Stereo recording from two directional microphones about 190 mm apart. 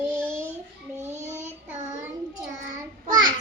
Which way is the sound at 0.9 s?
35° right (ahead or behind).